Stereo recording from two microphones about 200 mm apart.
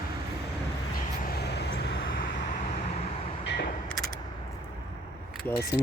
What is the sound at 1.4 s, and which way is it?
Vehicle, 55° left (ahead or behind).